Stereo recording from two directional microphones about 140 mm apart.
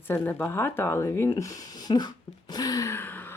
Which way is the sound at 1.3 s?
25° left (ahead or behind).